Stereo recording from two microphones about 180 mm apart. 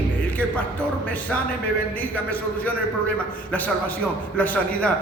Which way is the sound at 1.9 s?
10° left (ahead or behind).